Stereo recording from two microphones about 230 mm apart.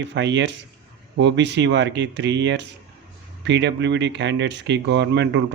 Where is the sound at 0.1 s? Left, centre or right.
Right.